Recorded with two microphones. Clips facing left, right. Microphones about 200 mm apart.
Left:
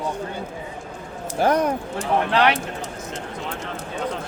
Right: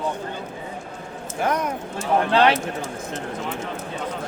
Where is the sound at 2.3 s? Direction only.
25° right (ahead or behind).